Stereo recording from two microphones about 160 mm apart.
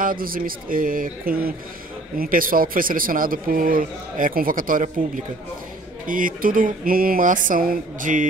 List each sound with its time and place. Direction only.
0.0 s speech: 60° right (ahead or behind)